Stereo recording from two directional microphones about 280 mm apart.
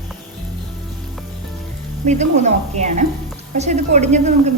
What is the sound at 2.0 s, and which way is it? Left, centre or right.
A woman's voice, right.